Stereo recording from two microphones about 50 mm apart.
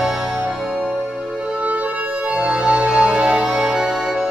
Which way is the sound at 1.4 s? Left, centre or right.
Centre.